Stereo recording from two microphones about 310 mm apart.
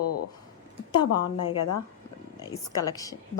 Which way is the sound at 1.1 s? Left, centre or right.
Left.